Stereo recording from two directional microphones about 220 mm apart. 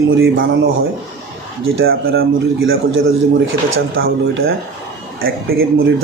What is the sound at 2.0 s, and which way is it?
A man's voice, 65° right (ahead or behind).